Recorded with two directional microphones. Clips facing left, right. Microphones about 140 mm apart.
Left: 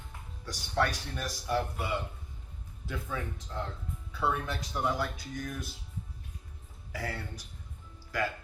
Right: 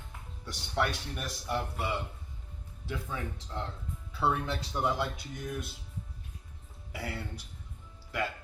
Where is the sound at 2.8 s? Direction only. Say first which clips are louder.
Even; 30° right (ahead or behind).